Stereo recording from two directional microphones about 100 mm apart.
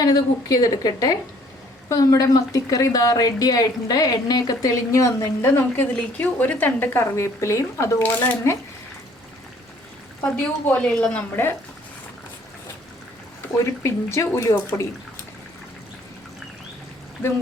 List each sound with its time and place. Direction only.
0.0 s a woman's voice: 40° left (ahead or behind)
8.1 s a woman's voice: 20° left (ahead or behind)
10.3 s a woman's voice: 15° left (ahead or behind)
13.8 s speech: 30° left (ahead or behind)